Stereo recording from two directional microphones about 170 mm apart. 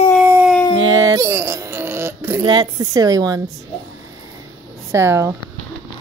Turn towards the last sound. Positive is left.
turn(degrees=-15)  # may be behind; listen again after turning